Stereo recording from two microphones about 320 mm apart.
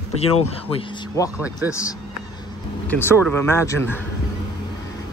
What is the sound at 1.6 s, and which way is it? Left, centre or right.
A man's voice, centre.